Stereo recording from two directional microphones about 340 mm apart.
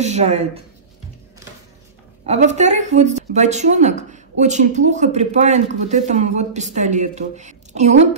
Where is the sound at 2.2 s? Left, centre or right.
Centre.